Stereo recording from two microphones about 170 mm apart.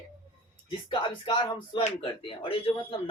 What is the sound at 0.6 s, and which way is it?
Speech, 30° left (ahead or behind).